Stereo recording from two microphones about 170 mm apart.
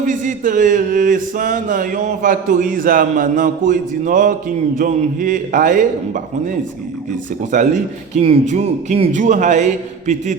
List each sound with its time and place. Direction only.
0.0 s speech: 50° right (ahead or behind)